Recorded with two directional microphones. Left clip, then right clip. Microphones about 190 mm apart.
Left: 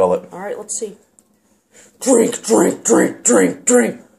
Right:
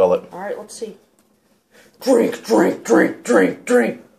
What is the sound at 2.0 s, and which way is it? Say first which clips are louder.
Speech: left 2 dB; 20° left (ahead or behind).